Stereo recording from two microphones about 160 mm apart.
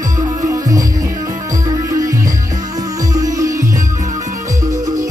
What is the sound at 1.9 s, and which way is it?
Music, 20° right (ahead or behind).